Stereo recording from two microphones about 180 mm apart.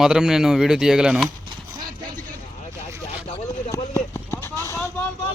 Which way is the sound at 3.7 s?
15° left (ahead or behind).